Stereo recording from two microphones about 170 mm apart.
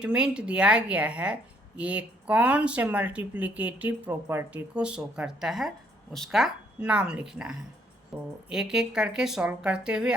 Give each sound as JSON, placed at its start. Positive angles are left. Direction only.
{"t": 0.0, "sound": "a woman's voice", "side_deg": -5}